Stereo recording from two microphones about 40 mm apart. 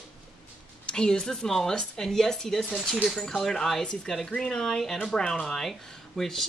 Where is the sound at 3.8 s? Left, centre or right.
Left.